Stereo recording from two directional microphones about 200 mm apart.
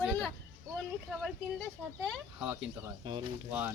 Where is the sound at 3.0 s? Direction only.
20° right (ahead or behind).